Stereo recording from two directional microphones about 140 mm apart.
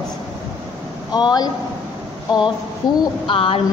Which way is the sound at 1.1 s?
30° left (ahead or behind).